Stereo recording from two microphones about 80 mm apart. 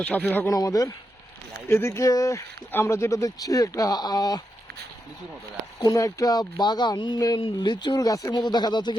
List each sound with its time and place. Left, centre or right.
0.0 s speech: centre
0.4 s speech: left
1.6 s speech: left
5.8 s speech: left
6.6 s speech: left
7.4 s speech: left
8.3 s speech: left